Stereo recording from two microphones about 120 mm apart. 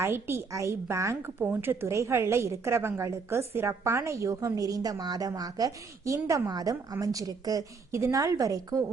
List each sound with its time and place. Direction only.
0.0 s a woman's voice: 20° right (ahead or behind)